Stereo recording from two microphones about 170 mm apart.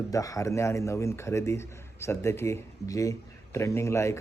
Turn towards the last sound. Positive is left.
turn(degrees=15)  # may be behind; listen again after turning